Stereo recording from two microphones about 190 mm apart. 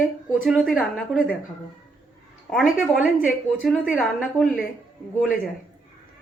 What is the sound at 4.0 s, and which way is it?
Speech, 5° left (ahead or behind).